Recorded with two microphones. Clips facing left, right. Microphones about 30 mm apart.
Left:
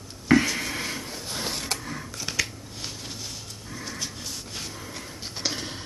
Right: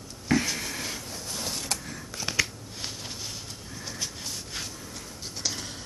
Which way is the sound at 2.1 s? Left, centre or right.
Centre.